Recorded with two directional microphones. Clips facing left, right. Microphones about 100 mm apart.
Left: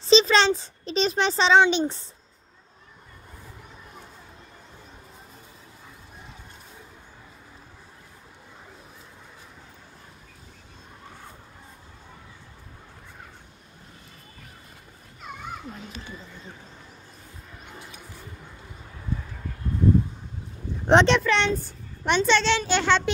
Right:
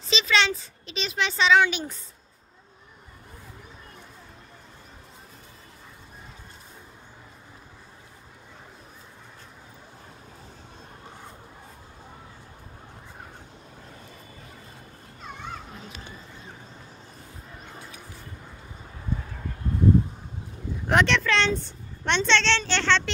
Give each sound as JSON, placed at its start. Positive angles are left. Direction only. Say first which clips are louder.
{"t": 0.0, "sound": "a child's voice", "louder": "left 6 dB", "side_deg": 35}
{"t": 20.8, "sound": "a sound", "louder": "left 5 dB", "side_deg": 25}
{"t": 21.2, "sound": "a woman's voice", "louder": "left 1 dB", "side_deg": 0}